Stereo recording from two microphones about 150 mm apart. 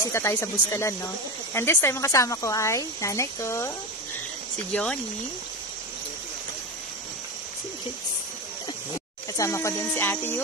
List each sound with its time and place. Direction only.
0.0 s speech: 15° left (ahead or behind)
9.4 s speech: 20° left (ahead or behind)